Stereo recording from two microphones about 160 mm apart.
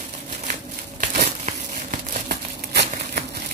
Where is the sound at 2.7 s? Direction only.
90° right.